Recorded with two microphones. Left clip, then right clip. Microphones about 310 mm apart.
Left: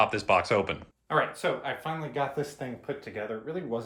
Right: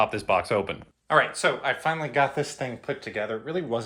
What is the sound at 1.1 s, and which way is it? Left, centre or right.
Speech, centre.